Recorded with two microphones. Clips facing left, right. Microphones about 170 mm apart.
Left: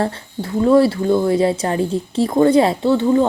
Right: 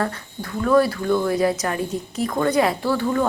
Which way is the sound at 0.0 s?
30° left (ahead or behind).